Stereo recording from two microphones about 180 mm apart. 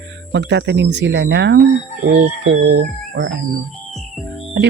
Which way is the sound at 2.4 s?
90° right.